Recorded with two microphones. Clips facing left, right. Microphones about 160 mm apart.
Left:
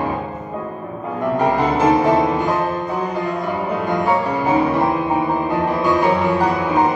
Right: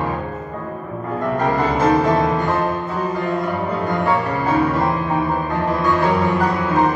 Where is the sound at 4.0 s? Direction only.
15° left (ahead or behind).